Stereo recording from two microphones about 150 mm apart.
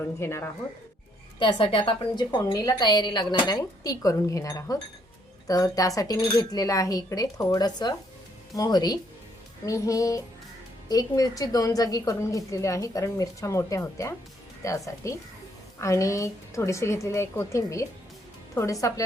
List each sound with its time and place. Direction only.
0.2 s speech: 15° left (ahead or behind)
1.4 s a woman's voice: 35° left (ahead or behind)